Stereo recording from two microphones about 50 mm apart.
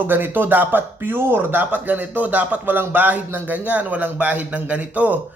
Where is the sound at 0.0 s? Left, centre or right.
Right.